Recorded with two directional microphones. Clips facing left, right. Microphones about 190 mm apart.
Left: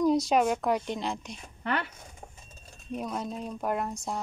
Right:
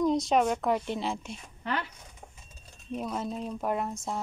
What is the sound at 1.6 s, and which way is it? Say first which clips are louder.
Speech: left 2 dB; 60° left (ahead or behind).